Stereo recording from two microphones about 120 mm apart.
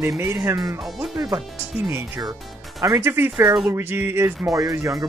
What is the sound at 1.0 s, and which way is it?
Speech, centre (ahead or behind).